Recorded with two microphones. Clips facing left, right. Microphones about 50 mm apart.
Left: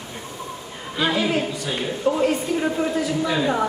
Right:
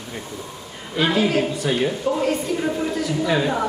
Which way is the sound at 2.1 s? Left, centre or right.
Centre.